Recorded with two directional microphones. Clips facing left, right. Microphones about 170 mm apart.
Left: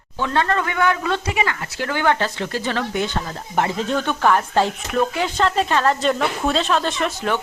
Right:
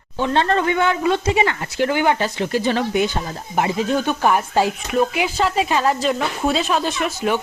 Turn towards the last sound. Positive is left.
turn(degrees=-10)  # may be behind; listen again after turning